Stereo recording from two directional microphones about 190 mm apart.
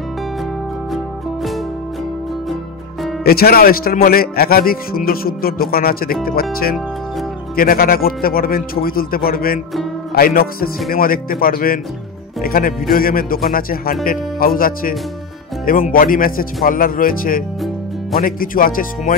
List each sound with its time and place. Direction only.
0.9 s music: centre (ahead or behind)
3.3 s a man's voice: 50° left (ahead or behind)